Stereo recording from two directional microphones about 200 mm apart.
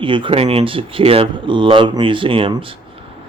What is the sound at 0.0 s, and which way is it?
Speech, 25° right (ahead or behind).